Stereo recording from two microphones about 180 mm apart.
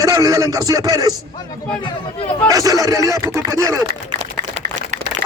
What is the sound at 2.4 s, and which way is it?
A man's voice, 20° right (ahead or behind).